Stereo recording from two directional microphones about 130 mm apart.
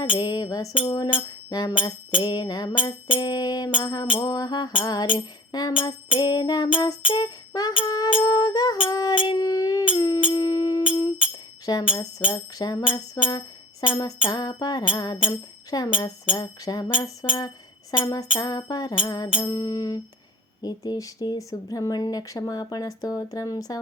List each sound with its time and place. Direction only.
0.2 s music: 30° left (ahead or behind)
6.8 s speech: 30° left (ahead or behind)
10.2 s music: 30° left (ahead or behind)
11.6 s speech: 30° left (ahead or behind)
11.9 s music: 30° left (ahead or behind)
17.9 s speech: 30° left (ahead or behind)